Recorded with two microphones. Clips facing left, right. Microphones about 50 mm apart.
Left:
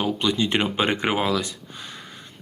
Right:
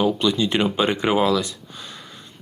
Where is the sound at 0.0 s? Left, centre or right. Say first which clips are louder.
Right 3 dB; left.